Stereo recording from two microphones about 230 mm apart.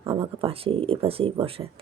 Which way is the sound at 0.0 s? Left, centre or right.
Right.